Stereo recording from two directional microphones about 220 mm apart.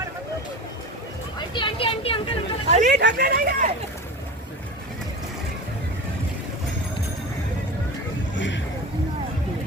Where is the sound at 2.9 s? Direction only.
50° right (ahead or behind).